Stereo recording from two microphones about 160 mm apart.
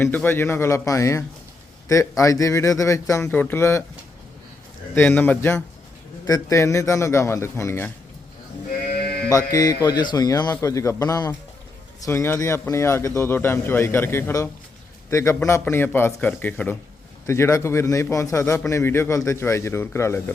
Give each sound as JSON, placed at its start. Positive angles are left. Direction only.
{"t": 0.0, "sound": "a man's voice", "side_deg": 10}
{"t": 4.9, "sound": "a man's voice", "side_deg": 10}
{"t": 9.0, "sound": "sheep", "side_deg": 75}
{"t": 9.3, "sound": "a man's voice", "side_deg": 20}